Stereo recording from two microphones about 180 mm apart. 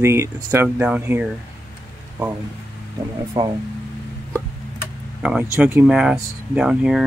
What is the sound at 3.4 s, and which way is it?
Speech, 20° right (ahead or behind).